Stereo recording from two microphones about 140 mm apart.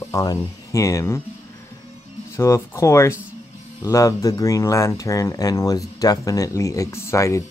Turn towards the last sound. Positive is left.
turn(degrees=20)  # may be behind; listen again after turning